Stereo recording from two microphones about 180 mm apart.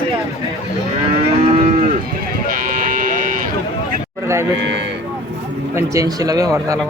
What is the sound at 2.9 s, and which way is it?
Vehicle, 50° right (ahead or behind).